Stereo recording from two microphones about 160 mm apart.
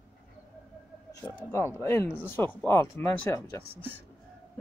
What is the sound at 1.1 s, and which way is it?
Speech, 20° left (ahead or behind).